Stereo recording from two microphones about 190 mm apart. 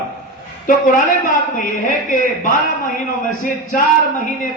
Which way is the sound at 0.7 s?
45° left (ahead or behind).